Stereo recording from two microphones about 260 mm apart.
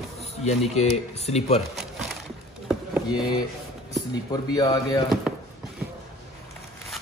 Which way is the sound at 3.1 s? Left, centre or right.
Centre.